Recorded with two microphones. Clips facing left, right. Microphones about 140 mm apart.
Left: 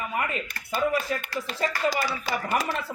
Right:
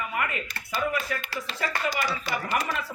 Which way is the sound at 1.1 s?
30° left (ahead or behind).